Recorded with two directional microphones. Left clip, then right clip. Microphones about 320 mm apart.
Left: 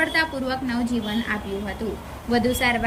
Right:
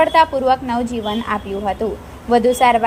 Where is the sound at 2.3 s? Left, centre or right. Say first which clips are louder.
Right 9 dB; centre.